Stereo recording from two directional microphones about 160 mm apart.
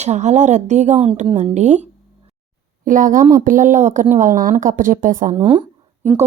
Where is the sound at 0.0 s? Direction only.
45° right (ahead or behind).